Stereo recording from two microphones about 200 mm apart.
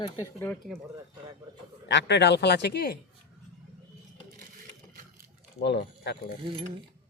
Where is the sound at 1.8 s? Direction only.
65° left (ahead or behind).